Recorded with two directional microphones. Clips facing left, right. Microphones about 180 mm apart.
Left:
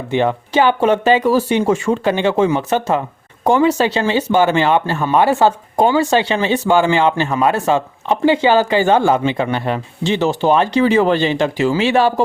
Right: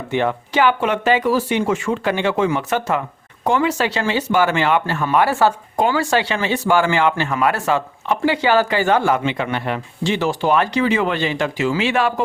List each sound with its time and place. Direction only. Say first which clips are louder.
0.1 s speech: left 3 dB; 25° left (ahead or behind)